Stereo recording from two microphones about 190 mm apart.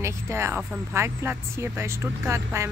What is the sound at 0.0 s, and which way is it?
Speech, 15° right (ahead or behind).